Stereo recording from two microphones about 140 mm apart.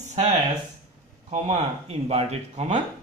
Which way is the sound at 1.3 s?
55° right (ahead or behind).